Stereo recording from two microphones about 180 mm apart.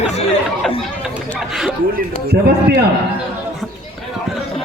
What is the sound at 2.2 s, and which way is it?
Speech, 65° right (ahead or behind).